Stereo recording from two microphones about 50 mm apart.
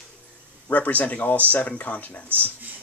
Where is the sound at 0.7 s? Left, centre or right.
Left.